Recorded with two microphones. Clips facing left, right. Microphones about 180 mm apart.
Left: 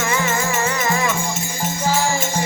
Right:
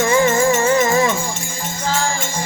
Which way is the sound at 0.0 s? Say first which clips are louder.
Right 7 dB; 30° right (ahead or behind).